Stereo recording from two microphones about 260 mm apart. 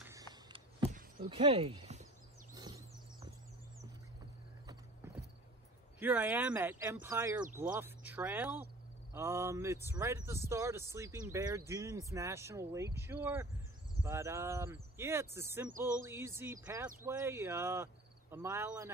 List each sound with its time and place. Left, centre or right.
0.0 s a sound: centre
0.9 s horse: right
2.5 s bird: centre
4.6 s clip-clop: centre
5.9 s speech: centre